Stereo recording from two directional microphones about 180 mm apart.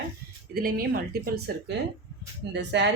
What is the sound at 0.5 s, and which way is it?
Speech, 55° right (ahead or behind).